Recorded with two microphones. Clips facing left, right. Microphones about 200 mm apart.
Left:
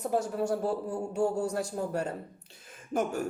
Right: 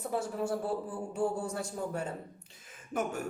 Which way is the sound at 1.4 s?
70° left (ahead or behind).